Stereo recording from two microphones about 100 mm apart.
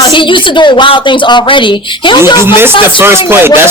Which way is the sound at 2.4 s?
25° right (ahead or behind).